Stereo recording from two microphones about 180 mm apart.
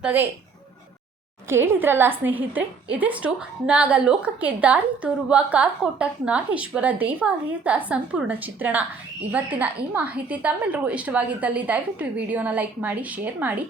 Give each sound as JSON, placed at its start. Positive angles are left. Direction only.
{"t": 0.0, "sound": "a woman's voice", "side_deg": -10}
{"t": 1.5, "sound": "a woman's voice", "side_deg": -10}